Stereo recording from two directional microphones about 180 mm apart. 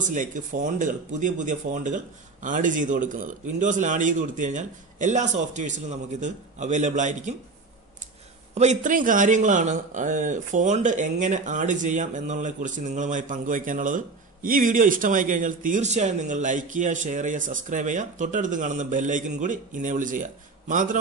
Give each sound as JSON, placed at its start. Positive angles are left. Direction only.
{"t": 0.0, "sound": "speech", "side_deg": -45}
{"t": 8.5, "sound": "speech", "side_deg": -45}